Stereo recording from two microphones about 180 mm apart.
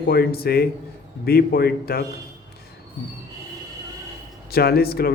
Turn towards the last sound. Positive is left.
turn(degrees=60)  # may be behind; listen again after turning